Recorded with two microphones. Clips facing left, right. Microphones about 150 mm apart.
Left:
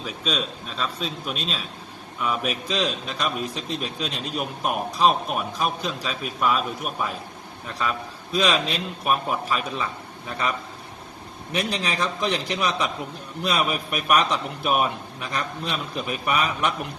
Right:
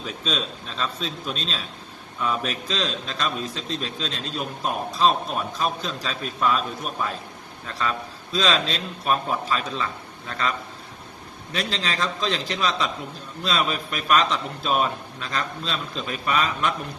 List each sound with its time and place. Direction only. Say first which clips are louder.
0.0 s a man's voice: left 1 dB; 5° left (ahead or behind)
7.7 s a man's voice: even; 15° left (ahead or behind)
11.5 s a man's voice: left 2 dB; 15° left (ahead or behind)